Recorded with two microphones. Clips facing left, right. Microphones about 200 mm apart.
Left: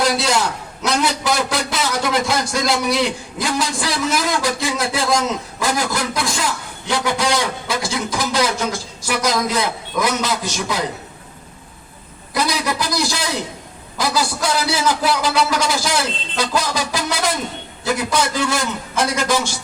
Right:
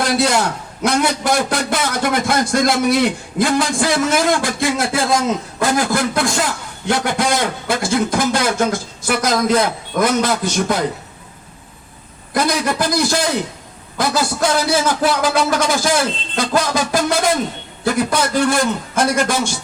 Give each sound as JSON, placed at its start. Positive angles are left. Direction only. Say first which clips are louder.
{"t": 0.0, "sound": "a man's voice", "louder": "right 2 dB", "side_deg": -55}
{"t": 12.3, "sound": "a man's voice", "louder": "right 3 dB", "side_deg": -50}